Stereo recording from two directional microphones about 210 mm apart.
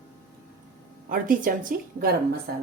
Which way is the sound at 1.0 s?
40° right (ahead or behind).